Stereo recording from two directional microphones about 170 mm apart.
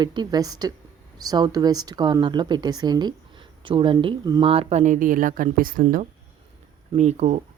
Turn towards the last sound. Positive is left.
turn(degrees=-40)  # may be behind; listen again after turning